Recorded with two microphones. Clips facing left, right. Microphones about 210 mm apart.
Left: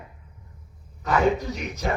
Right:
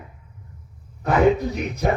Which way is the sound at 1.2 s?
60° right (ahead or behind).